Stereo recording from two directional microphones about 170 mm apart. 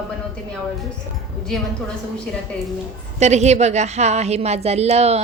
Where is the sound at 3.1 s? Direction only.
40° right (ahead or behind).